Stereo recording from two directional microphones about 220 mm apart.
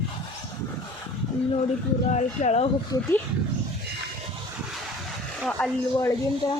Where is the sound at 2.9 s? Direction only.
15° left (ahead or behind).